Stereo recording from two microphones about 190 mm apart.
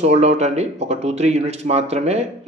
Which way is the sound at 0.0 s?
35° right (ahead or behind).